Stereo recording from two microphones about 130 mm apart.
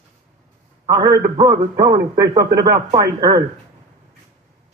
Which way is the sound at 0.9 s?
25° right (ahead or behind).